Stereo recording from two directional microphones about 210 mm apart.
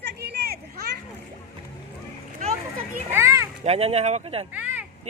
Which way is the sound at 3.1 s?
15° right (ahead or behind).